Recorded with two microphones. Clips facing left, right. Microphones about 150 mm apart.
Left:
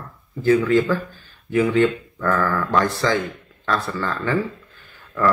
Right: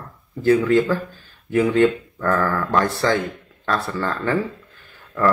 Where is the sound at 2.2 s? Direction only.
30° right (ahead or behind).